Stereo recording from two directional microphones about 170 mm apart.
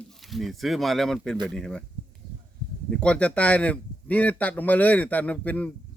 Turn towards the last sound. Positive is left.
turn(degrees=10)  # may be behind; listen again after turning